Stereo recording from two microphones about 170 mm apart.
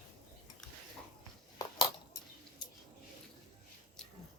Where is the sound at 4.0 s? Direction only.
5° left (ahead or behind).